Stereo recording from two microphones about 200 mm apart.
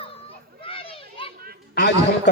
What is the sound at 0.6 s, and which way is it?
Children playing, 25° left (ahead or behind).